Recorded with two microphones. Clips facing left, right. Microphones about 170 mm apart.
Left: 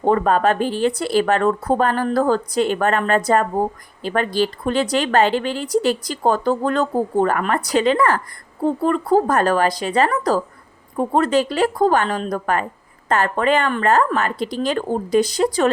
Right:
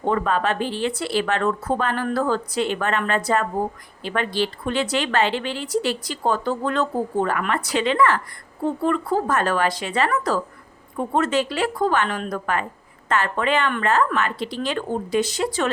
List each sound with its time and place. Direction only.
0.0 s speech: 45° left (ahead or behind)